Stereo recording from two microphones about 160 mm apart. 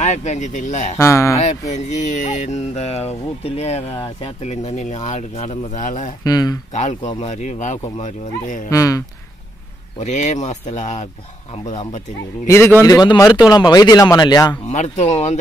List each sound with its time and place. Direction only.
0.0 s speech: 45° left (ahead or behind)
0.9 s speech: 15° left (ahead or behind)
1.7 s speech: 45° left (ahead or behind)
6.2 s speech: 25° left (ahead or behind)
6.7 s speech: 45° left (ahead or behind)
8.6 s speech: 20° left (ahead or behind)
9.9 s speech: 50° left (ahead or behind)
12.4 s speech: 15° left (ahead or behind)
14.7 s speech: 45° left (ahead or behind)